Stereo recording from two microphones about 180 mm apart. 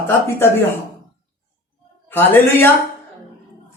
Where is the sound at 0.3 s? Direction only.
15° left (ahead or behind).